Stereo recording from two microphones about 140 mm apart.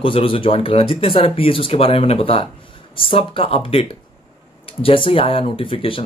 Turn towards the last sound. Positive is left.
turn(degrees=40)  # may be behind; listen again after turning